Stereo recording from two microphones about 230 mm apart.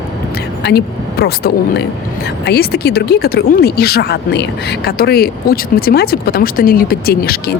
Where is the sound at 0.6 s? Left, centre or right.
Left.